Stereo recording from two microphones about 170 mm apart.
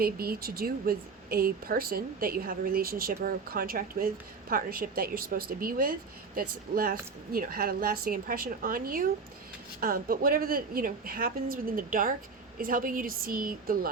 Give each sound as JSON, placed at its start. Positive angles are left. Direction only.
{"t": 0.0, "sound": "speech", "side_deg": -60}